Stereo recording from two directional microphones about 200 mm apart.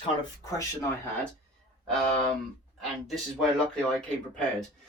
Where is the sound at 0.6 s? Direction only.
15° left (ahead or behind).